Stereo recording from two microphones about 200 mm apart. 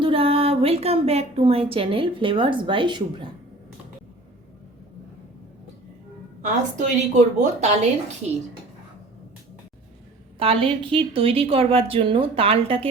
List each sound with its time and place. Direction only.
0.0 s a woman's voice: 25° right (ahead or behind)
6.4 s a woman's voice: 35° right (ahead or behind)
10.3 s a woman's voice: 25° right (ahead or behind)